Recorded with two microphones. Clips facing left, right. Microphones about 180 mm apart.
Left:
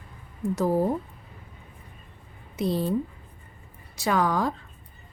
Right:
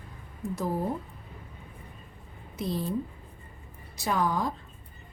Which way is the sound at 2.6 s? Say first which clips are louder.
Left 6 dB; 75° left (ahead or behind).